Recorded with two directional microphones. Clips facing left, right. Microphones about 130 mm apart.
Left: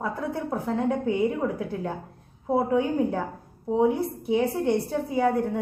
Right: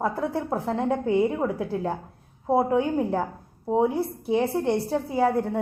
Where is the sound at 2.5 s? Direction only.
35° right (ahead or behind).